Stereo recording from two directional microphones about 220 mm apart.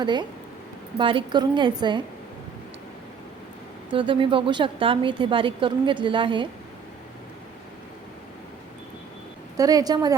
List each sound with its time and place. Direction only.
0.0 s a woman's voice: 20° right (ahead or behind)
3.9 s a woman's voice: 25° right (ahead or behind)
9.6 s a woman's voice: 15° right (ahead or behind)